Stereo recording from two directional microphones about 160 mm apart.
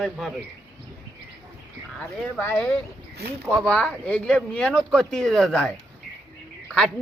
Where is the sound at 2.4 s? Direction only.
10° left (ahead or behind).